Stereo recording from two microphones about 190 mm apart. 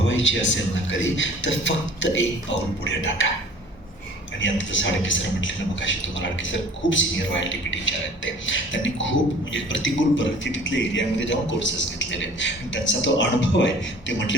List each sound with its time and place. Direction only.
0.1 s a man's voice: 85° left
4.4 s a man's voice: 80° left